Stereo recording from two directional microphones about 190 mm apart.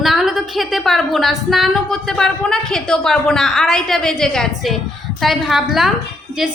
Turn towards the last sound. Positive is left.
turn(degrees=0)  # may be behind; listen again after turning